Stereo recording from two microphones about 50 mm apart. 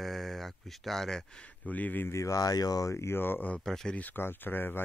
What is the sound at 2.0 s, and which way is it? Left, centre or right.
Speech, left.